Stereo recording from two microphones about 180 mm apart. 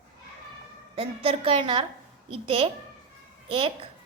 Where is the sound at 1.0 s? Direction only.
30° right (ahead or behind).